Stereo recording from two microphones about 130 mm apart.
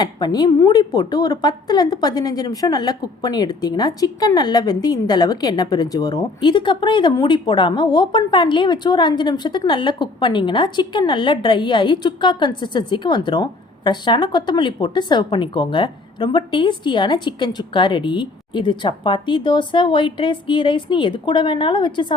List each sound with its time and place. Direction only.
0.0 s a woman's voice: 30° left (ahead or behind)